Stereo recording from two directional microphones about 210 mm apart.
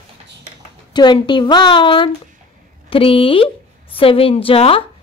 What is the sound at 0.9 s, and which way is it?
Speech, 20° left (ahead or behind).